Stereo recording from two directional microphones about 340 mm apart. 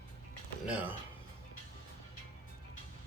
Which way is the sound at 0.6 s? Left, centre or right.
Centre.